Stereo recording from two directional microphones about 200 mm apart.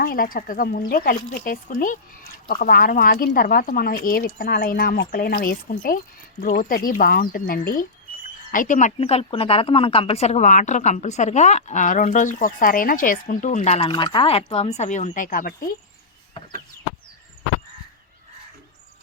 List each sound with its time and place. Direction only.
0.0 s speech: 45° left (ahead or behind)